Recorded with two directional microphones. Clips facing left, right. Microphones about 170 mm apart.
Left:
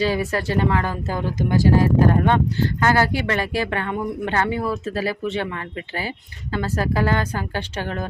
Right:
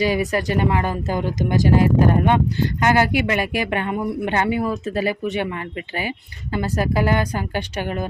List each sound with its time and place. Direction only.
0.0 s speech: 15° right (ahead or behind)